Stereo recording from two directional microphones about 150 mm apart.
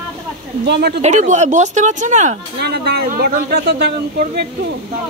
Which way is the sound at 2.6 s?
90° right.